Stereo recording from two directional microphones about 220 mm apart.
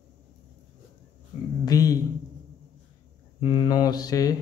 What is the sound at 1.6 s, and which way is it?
Speech, 15° left (ahead or behind).